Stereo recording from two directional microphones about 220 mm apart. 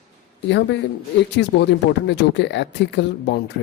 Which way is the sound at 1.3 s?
50° left (ahead or behind).